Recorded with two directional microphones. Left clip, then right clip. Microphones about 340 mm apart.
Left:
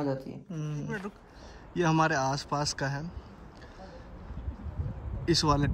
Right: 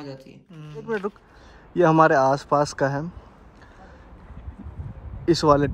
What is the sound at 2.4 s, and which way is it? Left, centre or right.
Speech, centre.